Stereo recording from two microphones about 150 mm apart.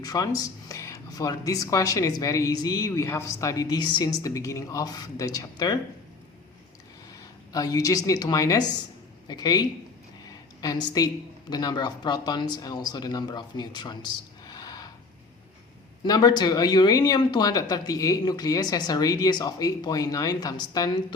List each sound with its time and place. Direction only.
0.0 s speech: 25° left (ahead or behind)
7.5 s speech: 25° left (ahead or behind)
16.0 s speech: 30° left (ahead or behind)